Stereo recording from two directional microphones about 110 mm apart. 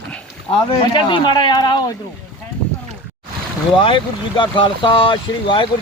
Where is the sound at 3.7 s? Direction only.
50° left (ahead or behind).